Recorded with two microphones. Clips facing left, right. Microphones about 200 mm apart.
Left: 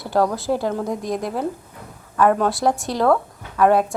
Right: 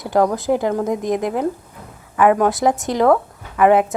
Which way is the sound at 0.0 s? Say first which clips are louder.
Right 3 dB; 15° right (ahead or behind).